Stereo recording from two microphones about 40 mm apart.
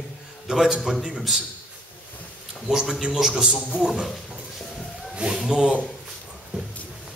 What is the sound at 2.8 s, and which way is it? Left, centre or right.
A man's voice, centre.